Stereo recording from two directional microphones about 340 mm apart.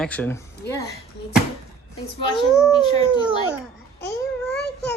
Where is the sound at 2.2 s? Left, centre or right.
Centre.